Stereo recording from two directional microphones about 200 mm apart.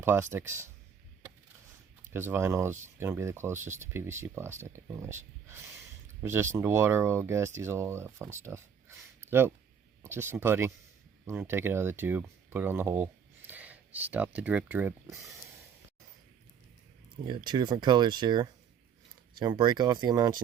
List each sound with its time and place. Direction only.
0.0 s speech: 10° right (ahead or behind)
2.1 s speech: 10° right (ahead or behind)
8.4 s a sound: 15° right (ahead or behind)
10.0 s speech: 10° right (ahead or behind)
17.2 s speech: 20° right (ahead or behind)